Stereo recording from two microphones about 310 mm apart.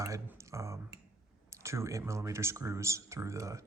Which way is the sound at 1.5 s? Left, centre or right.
Centre.